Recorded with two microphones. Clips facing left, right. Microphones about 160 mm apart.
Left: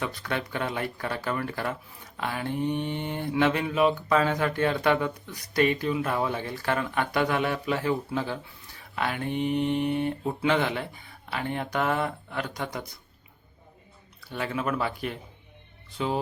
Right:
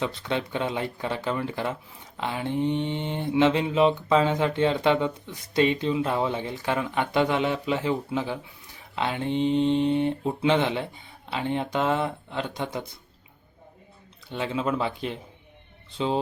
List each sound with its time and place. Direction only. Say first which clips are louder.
0.0 s mantra: right 3 dB; 20° right (ahead or behind)
14.3 s mantra: right 2 dB; 20° right (ahead or behind)